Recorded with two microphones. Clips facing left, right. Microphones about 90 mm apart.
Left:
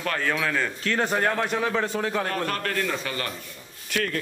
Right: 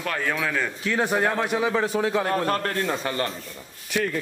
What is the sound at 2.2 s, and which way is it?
A man's voice, 25° right (ahead or behind).